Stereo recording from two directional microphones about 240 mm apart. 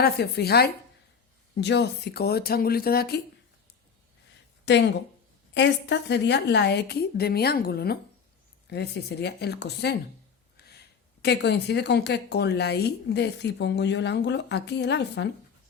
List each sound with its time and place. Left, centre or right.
0.0 s speech: left
4.6 s a woman's voice: left
10.6 s a sound: left
11.2 s a woman's voice: left